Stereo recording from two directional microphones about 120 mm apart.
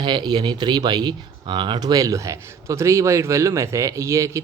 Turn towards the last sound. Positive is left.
turn(degrees=-25)  # may be behind; listen again after turning